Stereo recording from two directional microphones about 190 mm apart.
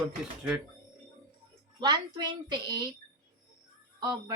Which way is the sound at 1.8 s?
20° right (ahead or behind).